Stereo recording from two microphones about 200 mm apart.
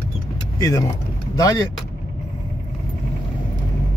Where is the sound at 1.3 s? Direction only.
20° left (ahead or behind).